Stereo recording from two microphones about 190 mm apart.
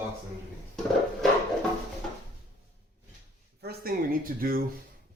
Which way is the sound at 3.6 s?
55° right (ahead or behind).